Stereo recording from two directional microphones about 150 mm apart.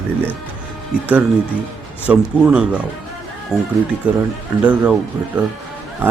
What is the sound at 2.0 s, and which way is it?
Speech, 10° right (ahead or behind).